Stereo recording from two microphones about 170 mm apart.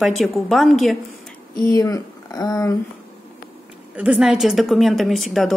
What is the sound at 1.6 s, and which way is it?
Speech, 20° left (ahead or behind).